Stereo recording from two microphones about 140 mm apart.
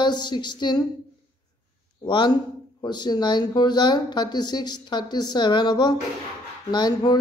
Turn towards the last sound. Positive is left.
turn(degrees=30)  # may be behind; listen again after turning